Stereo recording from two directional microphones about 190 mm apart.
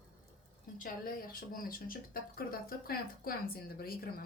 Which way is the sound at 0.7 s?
50° left (ahead or behind).